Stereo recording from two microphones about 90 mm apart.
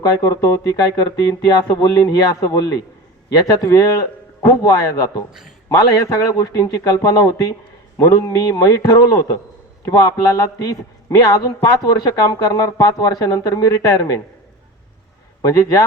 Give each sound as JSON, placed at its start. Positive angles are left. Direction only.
{"t": 0.0, "sound": "a man's voice", "side_deg": 40}
{"t": 15.4, "sound": "speech", "side_deg": 40}